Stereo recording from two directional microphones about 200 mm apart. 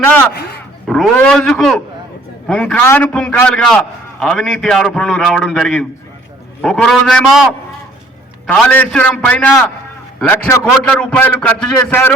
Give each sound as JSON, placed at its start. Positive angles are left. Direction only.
{"t": 0.9, "sound": "a man's voice", "side_deg": 0}
{"t": 8.4, "sound": "a man's voice", "side_deg": 10}